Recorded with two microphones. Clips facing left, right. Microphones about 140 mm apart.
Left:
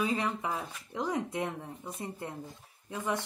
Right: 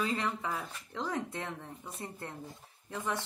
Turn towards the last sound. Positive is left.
turn(degrees=15)  # may be behind; listen again after turning